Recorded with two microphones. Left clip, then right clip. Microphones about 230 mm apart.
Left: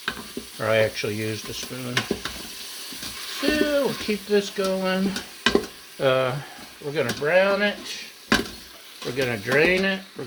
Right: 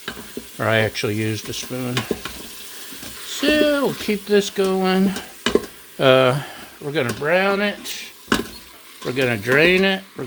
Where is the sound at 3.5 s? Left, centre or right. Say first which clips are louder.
Right 5 dB; right.